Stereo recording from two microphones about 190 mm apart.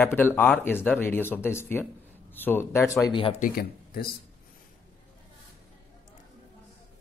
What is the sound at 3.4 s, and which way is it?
Speech, 50° left (ahead or behind).